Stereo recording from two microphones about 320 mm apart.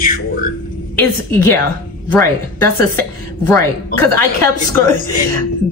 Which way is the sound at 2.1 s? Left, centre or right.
Centre.